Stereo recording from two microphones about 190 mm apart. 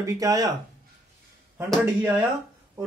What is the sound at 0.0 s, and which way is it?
Speech, 15° right (ahead or behind).